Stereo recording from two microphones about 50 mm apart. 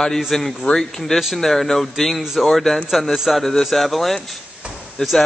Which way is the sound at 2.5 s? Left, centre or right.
Centre.